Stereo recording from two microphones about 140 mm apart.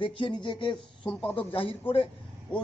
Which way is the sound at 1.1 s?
5° left (ahead or behind).